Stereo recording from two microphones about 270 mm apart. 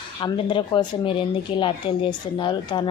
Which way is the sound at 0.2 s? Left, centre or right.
Centre.